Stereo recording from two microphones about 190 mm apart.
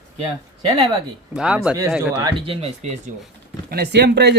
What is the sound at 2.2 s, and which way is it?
Speech, 30° right (ahead or behind).